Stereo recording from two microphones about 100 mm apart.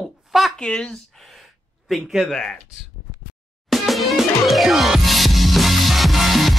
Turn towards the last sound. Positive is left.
turn(degrees=0)  # may be behind; listen again after turning